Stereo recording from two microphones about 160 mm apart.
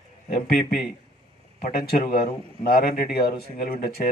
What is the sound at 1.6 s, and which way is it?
A man's voice, 65° left (ahead or behind).